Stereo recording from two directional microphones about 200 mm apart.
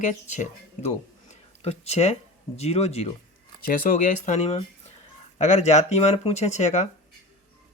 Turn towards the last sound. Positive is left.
turn(degrees=35)  # may be behind; listen again after turning